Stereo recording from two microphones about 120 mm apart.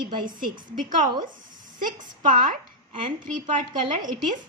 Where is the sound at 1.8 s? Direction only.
90° right.